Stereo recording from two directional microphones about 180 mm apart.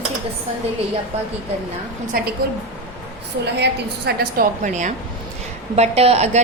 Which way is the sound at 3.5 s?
65° right (ahead or behind).